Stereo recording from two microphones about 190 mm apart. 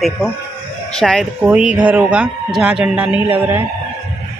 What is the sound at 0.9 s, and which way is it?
A man's voice, centre (ahead or behind).